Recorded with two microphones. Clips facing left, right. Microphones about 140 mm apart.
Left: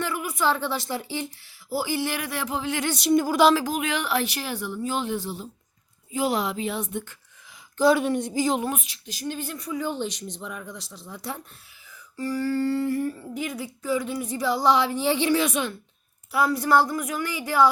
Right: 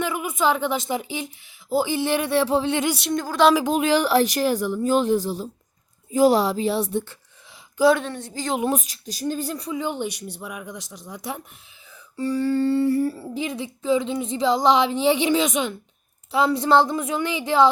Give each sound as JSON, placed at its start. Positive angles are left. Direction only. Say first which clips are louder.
{"t": 0.0, "sound": "a woman's voice", "louder": "right 3 dB", "side_deg": -20}
{"t": 3.0, "sound": "speech", "louder": "left 2 dB", "side_deg": 5}
{"t": 3.7, "sound": "speech", "louder": "right 7 dB", "side_deg": -30}
{"t": 7.8, "sound": "a woman's voice", "louder": "right 2 dB", "side_deg": 0}
{"t": 8.0, "sound": "speech", "louder": "left 7 dB", "side_deg": 15}
{"t": 8.7, "sound": "a woman's voice", "louder": "right 7 dB", "side_deg": -40}